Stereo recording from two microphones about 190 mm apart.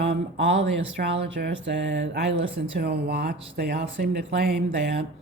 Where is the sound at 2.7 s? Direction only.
60° right (ahead or behind).